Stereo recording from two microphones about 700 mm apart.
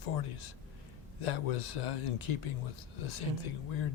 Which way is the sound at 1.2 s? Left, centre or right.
Left.